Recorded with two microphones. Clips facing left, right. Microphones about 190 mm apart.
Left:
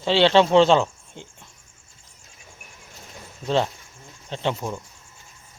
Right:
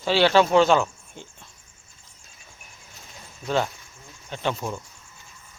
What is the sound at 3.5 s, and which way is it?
Speech, 25° left (ahead or behind).